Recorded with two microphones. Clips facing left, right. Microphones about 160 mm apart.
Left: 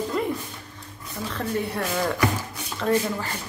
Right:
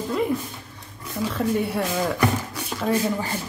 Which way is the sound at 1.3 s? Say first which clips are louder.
Right 3 dB; 5° right (ahead or behind).